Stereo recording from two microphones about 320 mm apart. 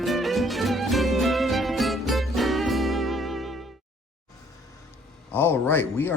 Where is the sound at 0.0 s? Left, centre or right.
Centre.